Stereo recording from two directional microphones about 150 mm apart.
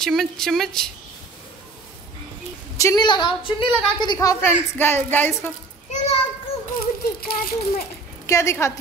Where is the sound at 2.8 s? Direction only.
25° left (ahead or behind).